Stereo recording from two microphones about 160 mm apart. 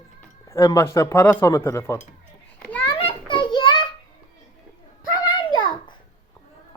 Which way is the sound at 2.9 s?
30° left (ahead or behind).